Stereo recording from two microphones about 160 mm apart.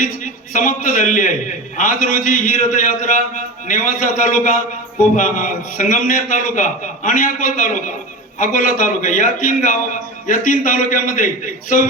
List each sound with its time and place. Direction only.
0.5 s a man's voice: 55° left (ahead or behind)